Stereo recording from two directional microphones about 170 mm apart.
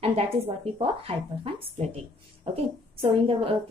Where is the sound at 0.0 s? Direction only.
35° right (ahead or behind).